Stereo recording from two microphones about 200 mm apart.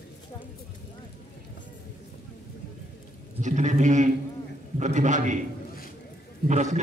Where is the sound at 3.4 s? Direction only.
35° right (ahead or behind).